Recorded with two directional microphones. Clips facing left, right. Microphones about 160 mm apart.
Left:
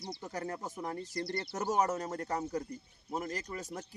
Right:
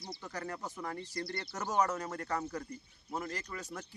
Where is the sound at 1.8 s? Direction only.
20° left (ahead or behind).